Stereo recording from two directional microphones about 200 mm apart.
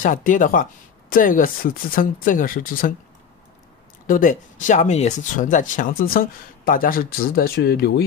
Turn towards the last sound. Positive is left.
turn(degrees=55)  # may be behind; listen again after turning